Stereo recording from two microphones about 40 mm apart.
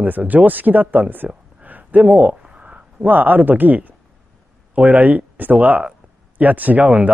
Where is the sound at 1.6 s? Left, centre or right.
Right.